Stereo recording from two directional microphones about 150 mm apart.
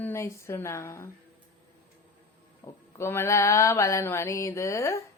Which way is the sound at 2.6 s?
20° left (ahead or behind).